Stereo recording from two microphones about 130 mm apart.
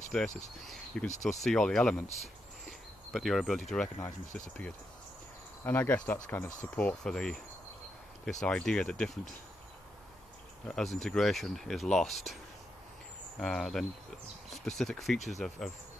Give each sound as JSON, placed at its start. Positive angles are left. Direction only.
{"t": 0.1, "sound": "speech", "side_deg": 5}
{"t": 2.6, "sound": "a sound", "side_deg": 0}
{"t": 5.6, "sound": "speech", "side_deg": 15}
{"t": 10.7, "sound": "speech", "side_deg": 0}
{"t": 13.4, "sound": "speech", "side_deg": 5}